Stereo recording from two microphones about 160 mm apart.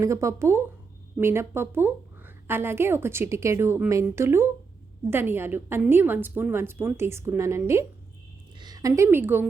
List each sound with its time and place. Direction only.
0.0 s a woman's voice: 20° right (ahead or behind)